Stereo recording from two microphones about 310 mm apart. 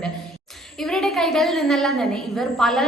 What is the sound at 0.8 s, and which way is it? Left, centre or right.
A woman's voice, centre.